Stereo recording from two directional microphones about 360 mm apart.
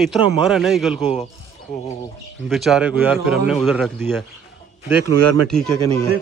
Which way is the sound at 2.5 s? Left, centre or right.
Centre.